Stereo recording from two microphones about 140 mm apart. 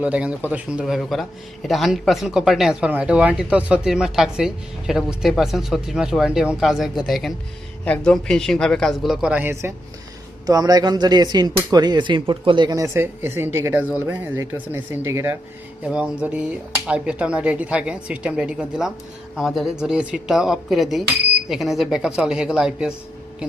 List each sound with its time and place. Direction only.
0.0 s speech: 10° right (ahead or behind)